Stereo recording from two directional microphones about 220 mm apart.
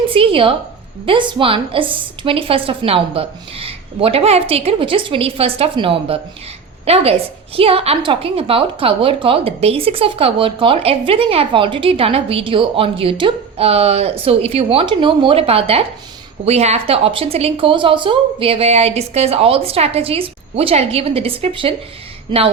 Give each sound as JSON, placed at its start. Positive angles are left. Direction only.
{"t": 0.1, "sound": "a woman's voice", "side_deg": -25}